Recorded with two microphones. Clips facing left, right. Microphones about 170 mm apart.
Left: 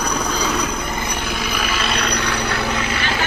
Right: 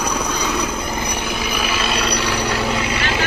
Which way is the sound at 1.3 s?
10° right (ahead or behind).